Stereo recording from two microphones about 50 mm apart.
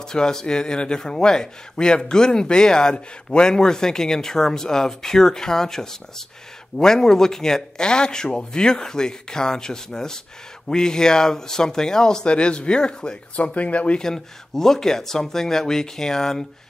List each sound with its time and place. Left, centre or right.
0.0 s a man's voice: centre
14.0 s a man's voice: centre